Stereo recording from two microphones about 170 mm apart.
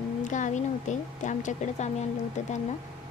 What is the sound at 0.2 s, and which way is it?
A woman's voice, 45° left (ahead or behind).